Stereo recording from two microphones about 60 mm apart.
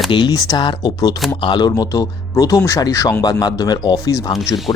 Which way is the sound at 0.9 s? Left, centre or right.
Left.